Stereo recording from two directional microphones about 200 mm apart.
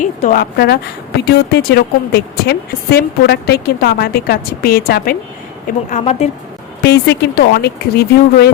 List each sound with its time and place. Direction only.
0.0 s a woman's voice: 40° left (ahead or behind)
5.9 s speech: 35° left (ahead or behind)
6.8 s speech: 55° left (ahead or behind)